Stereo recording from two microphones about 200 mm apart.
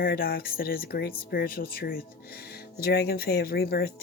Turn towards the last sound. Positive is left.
turn(degrees=50)  # may be behind; listen again after turning